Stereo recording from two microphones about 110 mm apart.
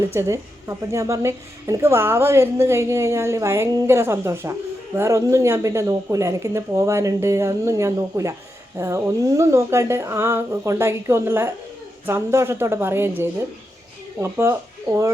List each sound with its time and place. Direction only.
0.1 s a woman's voice: 25° right (ahead or behind)